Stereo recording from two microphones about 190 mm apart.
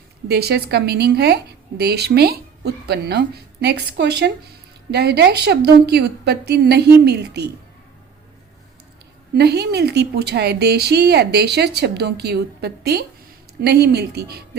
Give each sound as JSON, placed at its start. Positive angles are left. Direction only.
{"t": 0.3, "sound": "a woman's voice", "side_deg": -55}
{"t": 9.3, "sound": "a woman's voice", "side_deg": -60}